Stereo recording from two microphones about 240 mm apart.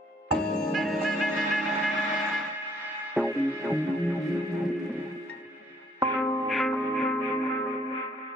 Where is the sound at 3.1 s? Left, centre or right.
Centre.